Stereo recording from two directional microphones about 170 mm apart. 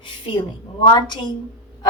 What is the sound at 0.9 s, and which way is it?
Speech, 25° left (ahead or behind).